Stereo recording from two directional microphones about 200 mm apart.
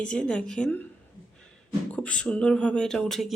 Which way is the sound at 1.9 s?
5° left (ahead or behind).